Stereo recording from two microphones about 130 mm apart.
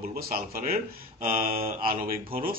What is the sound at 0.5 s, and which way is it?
Speech, 90° right.